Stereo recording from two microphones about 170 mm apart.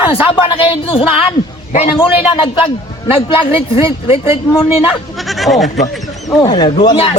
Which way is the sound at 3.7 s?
35° left (ahead or behind).